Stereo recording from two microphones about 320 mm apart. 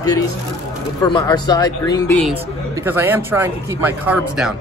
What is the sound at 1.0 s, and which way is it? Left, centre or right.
Speech, centre.